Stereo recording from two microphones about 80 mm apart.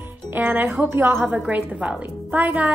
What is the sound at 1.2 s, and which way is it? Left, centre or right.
A woman's voice, right.